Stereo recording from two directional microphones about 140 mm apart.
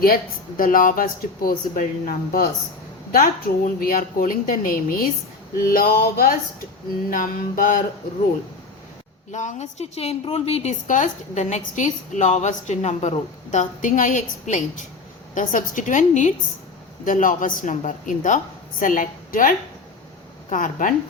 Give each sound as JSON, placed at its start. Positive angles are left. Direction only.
{"t": 0.0, "sound": "a woman's voice", "side_deg": 85}
{"t": 7.1, "sound": "speech", "side_deg": 75}
{"t": 9.3, "sound": "a woman's voice", "side_deg": 60}
{"t": 17.1, "sound": "speech", "side_deg": 70}